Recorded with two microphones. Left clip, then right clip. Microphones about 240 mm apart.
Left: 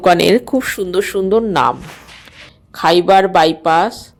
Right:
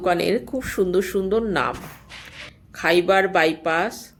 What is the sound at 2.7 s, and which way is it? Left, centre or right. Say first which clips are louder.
Speech: left 8 dB; left.